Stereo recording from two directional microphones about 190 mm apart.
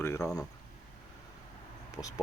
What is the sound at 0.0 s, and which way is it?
Speech, 15° left (ahead or behind).